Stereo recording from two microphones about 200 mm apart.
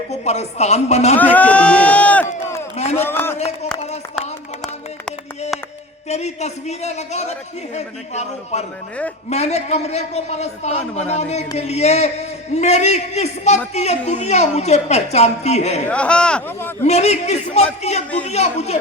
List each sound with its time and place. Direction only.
0.1 s a woman's voice: 35° left (ahead or behind)
1.1 s a man's voice: 10° left (ahead or behind)
2.7 s a man's voice: 35° left (ahead or behind)
3.0 s a man's voice: 10° left (ahead or behind)
3.3 s a sound: 35° left (ahead or behind)
6.1 s a woman's voice: 35° left (ahead or behind)
15.9 s speech: 5° left (ahead or behind)
16.8 s a woman's voice: 35° left (ahead or behind)